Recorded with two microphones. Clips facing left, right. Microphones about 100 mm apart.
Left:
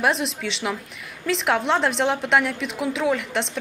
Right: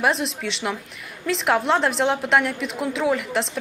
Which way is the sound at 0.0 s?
Centre (ahead or behind).